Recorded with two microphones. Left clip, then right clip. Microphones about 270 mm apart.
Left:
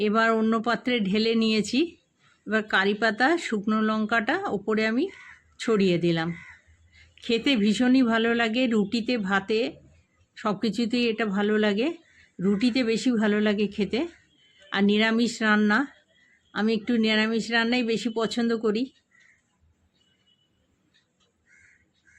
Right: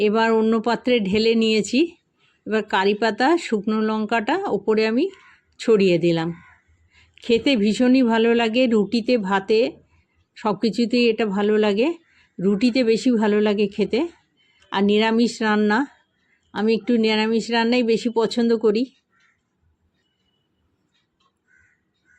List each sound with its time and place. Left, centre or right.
0.0 s speech: centre